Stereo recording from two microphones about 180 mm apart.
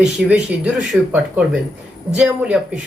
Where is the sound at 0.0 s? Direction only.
5° right (ahead or behind).